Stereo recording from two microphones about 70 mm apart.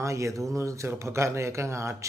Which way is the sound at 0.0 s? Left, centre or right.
Right.